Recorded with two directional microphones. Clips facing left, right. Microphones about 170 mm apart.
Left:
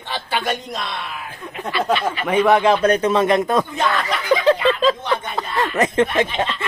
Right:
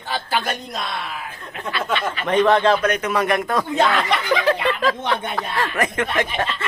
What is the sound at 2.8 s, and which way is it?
Speech, 30° left (ahead or behind).